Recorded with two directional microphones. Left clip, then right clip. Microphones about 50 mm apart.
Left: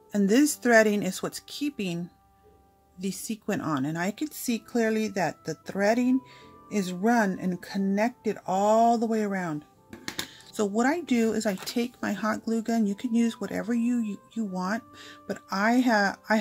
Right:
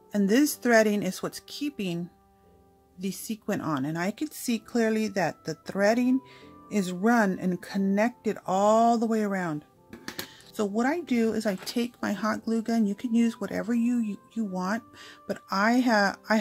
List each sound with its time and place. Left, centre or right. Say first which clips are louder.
0.1 s speech: left 1 dB; centre
4.4 s a woman's voice: even; right
6.7 s speech: even; right
10.7 s speech: left 2 dB; centre
11.6 s speech: even; right